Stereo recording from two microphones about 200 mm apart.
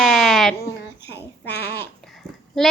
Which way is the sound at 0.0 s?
Centre (ahead or behind).